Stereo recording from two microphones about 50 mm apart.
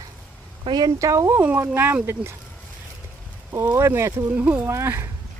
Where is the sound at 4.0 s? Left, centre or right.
Right.